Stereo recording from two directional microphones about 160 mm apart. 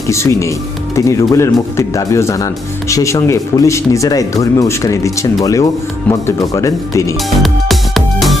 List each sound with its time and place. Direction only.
0.1 s speech: 20° left (ahead or behind)
7.4 s music: centre (ahead or behind)